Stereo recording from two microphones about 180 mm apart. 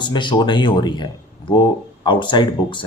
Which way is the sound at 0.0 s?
25° left (ahead or behind).